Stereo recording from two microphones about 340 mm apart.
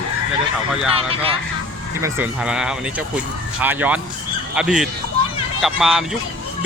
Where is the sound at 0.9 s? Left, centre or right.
Centre.